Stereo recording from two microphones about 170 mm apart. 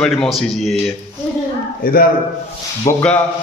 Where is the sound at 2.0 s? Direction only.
60° left (ahead or behind).